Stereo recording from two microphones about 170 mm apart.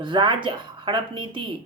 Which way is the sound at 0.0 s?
30° right (ahead or behind).